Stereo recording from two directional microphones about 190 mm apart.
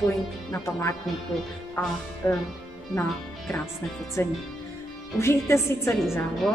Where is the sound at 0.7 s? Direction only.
15° left (ahead or behind).